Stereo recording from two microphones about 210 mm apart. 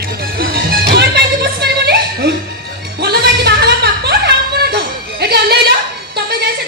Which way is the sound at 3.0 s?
50° right (ahead or behind).